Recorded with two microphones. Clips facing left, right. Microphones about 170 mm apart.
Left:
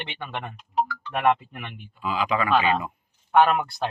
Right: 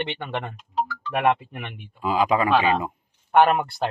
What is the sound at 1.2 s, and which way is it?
Speech, 25° right (ahead or behind).